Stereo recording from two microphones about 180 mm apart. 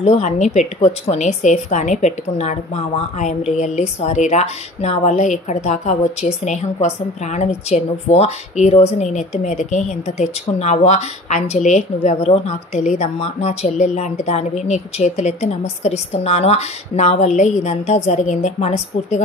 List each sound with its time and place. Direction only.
0.0 s speech: 40° left (ahead or behind)